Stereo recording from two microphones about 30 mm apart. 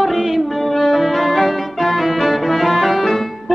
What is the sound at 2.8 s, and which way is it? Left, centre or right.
Music, centre.